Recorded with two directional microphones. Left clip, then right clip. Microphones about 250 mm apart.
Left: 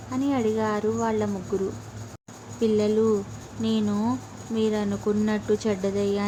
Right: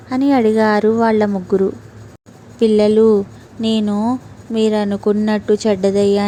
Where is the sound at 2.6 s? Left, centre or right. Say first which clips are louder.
Right 11 dB; right.